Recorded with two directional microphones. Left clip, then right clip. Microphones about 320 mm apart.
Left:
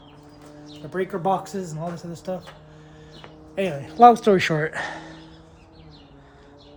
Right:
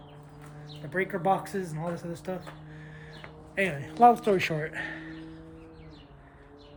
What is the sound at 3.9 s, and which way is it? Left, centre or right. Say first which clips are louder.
Speech: left 7 dB; left.